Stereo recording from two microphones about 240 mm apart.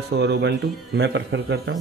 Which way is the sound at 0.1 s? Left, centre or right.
Right.